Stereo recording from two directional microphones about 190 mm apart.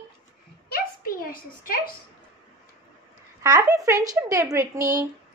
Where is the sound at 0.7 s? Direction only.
50° left (ahead or behind).